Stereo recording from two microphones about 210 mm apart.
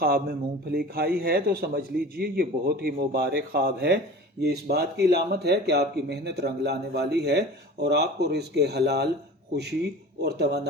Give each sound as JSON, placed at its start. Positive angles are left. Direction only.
{"t": 0.0, "sound": "speech", "side_deg": -45}
{"t": 10.2, "sound": "speech", "side_deg": -50}